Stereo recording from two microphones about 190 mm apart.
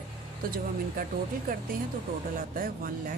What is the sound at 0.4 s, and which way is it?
A woman's voice, 50° right (ahead or behind).